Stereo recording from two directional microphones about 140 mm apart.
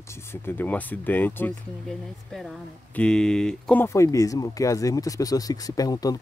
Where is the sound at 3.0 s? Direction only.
5° left (ahead or behind).